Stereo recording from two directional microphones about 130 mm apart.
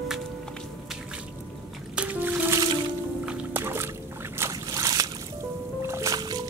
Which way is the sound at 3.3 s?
10° right (ahead or behind).